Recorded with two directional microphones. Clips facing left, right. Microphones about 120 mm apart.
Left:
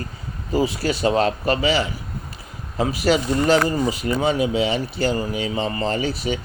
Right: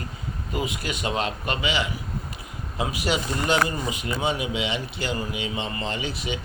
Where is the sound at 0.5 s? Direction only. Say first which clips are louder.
Left 9 dB; 30° left (ahead or behind).